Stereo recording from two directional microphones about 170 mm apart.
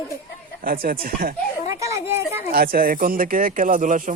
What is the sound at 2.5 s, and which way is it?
Speech, 60° right (ahead or behind).